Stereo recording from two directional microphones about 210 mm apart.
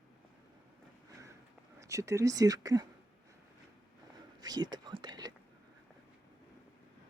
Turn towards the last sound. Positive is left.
turn(degrees=-20)  # may be behind; listen again after turning